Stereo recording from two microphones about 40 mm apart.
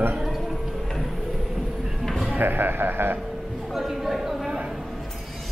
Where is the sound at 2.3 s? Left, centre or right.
Right.